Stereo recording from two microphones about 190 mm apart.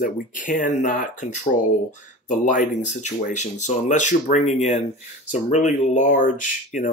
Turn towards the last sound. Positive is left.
turn(degrees=40)  # may be behind; listen again after turning